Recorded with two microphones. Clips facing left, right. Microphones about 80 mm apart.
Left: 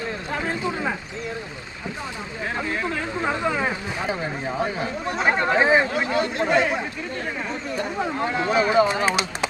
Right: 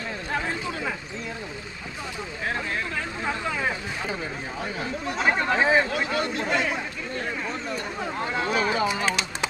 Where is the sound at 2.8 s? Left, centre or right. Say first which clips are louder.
Left 4 dB; left.